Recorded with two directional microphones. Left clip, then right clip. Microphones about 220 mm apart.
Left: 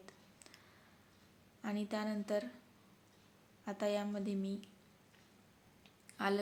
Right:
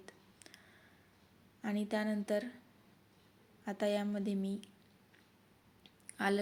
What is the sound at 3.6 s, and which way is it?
A woman's voice, 15° right (ahead or behind).